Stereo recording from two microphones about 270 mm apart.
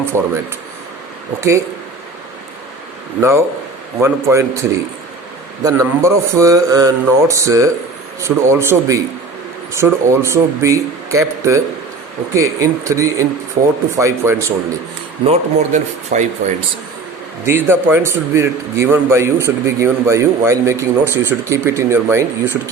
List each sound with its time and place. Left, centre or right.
0.1 s a man's voice: centre
1.4 s a man's voice: centre
3.2 s a man's voice: centre
15.2 s speech: right
17.4 s a man's voice: centre